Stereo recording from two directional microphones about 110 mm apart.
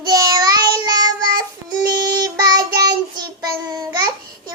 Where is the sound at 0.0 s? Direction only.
35° right (ahead or behind).